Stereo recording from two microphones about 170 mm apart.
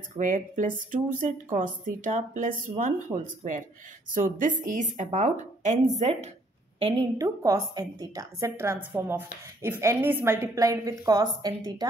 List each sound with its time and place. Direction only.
0.2 s a woman's voice: 50° right (ahead or behind); by 7.1 s 35° right (ahead or behind)
7.2 s a woman's voice: 20° right (ahead or behind)